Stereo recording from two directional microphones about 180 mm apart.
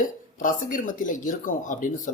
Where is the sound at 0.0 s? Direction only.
45° left (ahead or behind).